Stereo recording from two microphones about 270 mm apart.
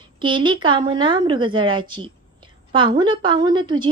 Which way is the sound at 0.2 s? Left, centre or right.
Centre.